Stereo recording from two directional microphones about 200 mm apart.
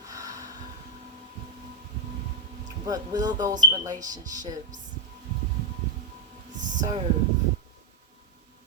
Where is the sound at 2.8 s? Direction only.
20° right (ahead or behind).